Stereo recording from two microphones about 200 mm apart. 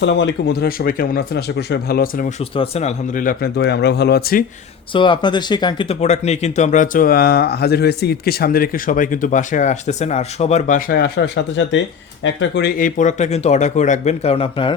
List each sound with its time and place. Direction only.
0.0 s speech: 65° left (ahead or behind); by 2.3 s 45° left (ahead or behind)
2.4 s speech: 30° left (ahead or behind); by 4.4 s 50° left (ahead or behind)
4.9 s speech: 25° left (ahead or behind)